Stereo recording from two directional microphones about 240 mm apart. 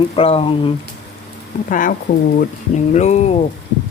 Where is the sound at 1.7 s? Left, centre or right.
Left.